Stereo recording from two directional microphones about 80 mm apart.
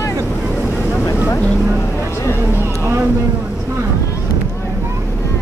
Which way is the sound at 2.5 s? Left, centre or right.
Right.